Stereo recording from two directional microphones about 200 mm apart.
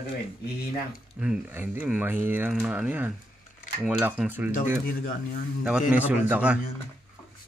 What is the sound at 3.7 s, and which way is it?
Speech, 5° left (ahead or behind).